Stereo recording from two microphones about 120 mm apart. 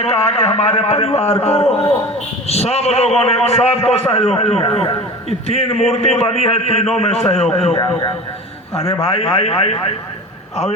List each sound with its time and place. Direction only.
0.0 s a man's voice: 60° left (ahead or behind)
5.5 s a man's voice: 60° left (ahead or behind)